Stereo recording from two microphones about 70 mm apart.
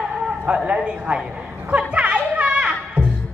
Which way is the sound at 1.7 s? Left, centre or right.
Centre.